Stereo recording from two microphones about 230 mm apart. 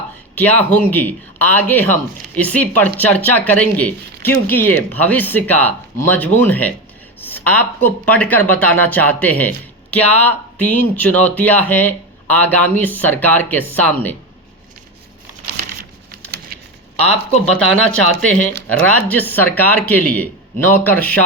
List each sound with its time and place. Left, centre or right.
0.3 s speech: centre
16.5 s a sound: right
17.4 s speech: centre